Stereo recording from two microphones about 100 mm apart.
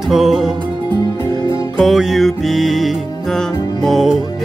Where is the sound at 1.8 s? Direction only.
Centre (ahead or behind).